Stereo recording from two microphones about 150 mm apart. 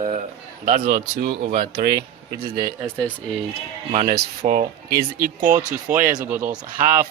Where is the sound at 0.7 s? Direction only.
60° right (ahead or behind).